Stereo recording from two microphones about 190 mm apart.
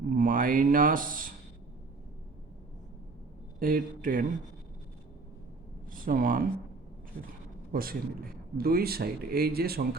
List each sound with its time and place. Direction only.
0.1 s a man's voice: 45° right (ahead or behind)
3.6 s a man's voice: 45° right (ahead or behind)
5.9 s speech: 45° right (ahead or behind)
7.7 s a man's voice: 50° right (ahead or behind)